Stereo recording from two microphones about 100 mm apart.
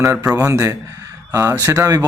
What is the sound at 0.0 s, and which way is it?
Speech, 35° right (ahead or behind).